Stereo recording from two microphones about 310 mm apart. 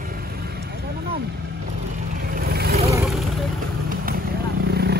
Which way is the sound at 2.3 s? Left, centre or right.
Right.